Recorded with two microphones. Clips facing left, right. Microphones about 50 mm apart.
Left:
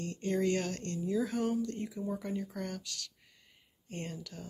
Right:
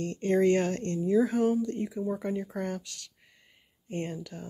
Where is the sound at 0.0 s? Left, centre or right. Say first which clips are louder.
Right 7 dB; right.